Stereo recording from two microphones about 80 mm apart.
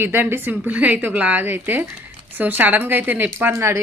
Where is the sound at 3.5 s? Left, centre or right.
Right.